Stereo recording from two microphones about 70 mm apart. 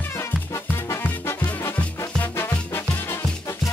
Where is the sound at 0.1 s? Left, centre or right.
Left.